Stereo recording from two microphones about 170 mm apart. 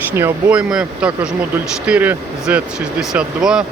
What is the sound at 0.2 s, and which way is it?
Speech, 10° right (ahead or behind).